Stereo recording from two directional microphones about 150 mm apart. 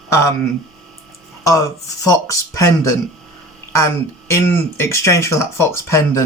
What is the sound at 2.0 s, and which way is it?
Speech, 20° left (ahead or behind).